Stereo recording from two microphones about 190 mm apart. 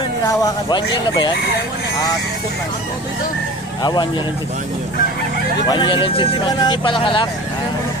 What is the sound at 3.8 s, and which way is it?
Speech, 20° left (ahead or behind).